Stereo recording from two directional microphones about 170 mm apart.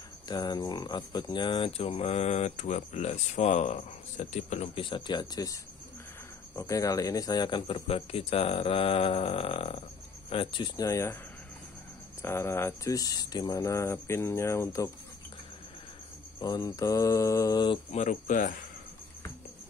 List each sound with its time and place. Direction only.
0.3 s speech: 25° left (ahead or behind); by 4.8 s 45° left (ahead or behind)
4.8 s mantra: 30° left (ahead or behind)
6.5 s speech: 20° left (ahead or behind); by 9.8 s 35° left (ahead or behind)
10.3 s mantra: 30° left (ahead or behind)
12.2 s speech: 15° left (ahead or behind)
16.3 s mantra: 20° left (ahead or behind)
17.9 s speech: 45° left (ahead or behind)